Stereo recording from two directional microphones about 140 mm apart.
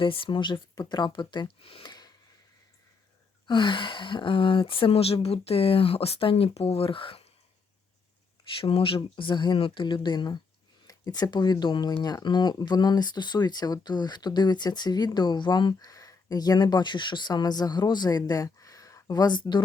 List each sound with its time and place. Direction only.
0.0 s speech: 40° left (ahead or behind)
3.4 s speech: 35° left (ahead or behind)
8.6 s speech: 40° left (ahead or behind)